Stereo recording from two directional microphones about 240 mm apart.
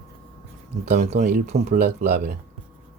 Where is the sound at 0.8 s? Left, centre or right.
Right.